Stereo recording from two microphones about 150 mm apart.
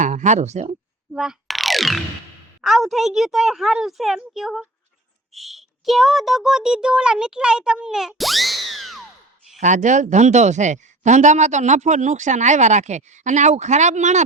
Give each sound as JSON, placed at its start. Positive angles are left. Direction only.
{"t": 0.0, "sound": "speech", "side_deg": -55}
{"t": 1.1, "sound": "boing", "side_deg": -5}
{"t": 2.6, "sound": "a woman's voice", "side_deg": 0}
{"t": 9.6, "sound": "speech", "side_deg": -55}